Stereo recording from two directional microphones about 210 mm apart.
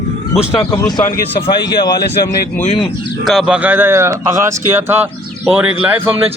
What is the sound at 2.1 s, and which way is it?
Speech, 45° left (ahead or behind).